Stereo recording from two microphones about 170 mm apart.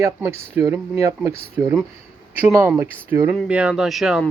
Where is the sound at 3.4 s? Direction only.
5° right (ahead or behind).